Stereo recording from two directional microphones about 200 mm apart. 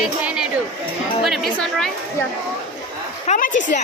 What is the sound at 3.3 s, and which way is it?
Speech, 40° left (ahead or behind).